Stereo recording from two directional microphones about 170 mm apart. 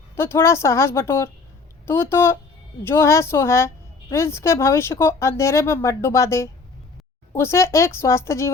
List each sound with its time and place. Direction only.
0.2 s speech: 15° left (ahead or behind)